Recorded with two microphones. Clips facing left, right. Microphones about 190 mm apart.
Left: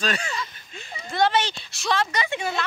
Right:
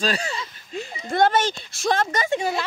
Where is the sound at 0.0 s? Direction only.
35° right (ahead or behind).